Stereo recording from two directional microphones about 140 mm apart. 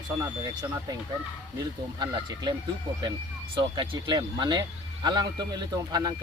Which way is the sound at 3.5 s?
35° right (ahead or behind).